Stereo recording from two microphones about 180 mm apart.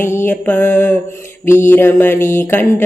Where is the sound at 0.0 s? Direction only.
15° left (ahead or behind).